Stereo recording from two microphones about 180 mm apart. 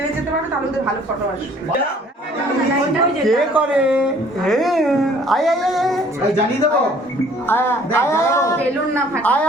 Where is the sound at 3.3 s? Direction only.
5° right (ahead or behind).